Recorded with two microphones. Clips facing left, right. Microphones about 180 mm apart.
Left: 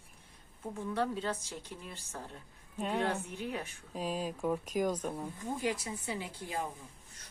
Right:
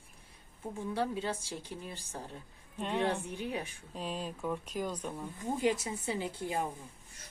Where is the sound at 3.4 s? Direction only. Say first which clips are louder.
Right 1 dB; 15° right (ahead or behind).